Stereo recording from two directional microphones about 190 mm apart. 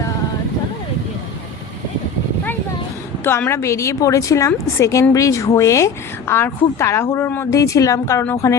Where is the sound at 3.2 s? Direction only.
10° left (ahead or behind).